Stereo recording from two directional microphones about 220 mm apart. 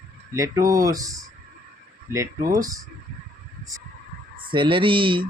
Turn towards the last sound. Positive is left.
turn(degrees=-25)  # may be behind; listen again after turning